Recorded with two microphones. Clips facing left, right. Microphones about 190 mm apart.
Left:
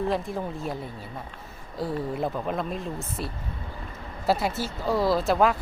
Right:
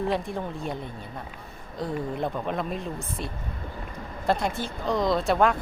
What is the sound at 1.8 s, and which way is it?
Speech, 5° left (ahead or behind).